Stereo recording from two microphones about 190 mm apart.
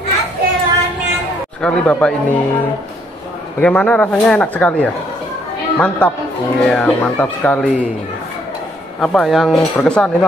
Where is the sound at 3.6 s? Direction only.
5° left (ahead or behind).